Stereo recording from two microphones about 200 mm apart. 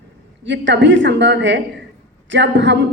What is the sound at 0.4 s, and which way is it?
A woman's voice, 60° right (ahead or behind).